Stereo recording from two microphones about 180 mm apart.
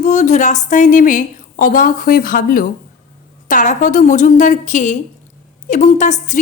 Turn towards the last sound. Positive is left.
turn(degrees=40)  # may be behind; listen again after turning